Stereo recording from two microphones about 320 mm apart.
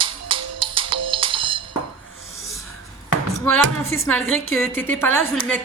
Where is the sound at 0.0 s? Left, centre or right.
Centre.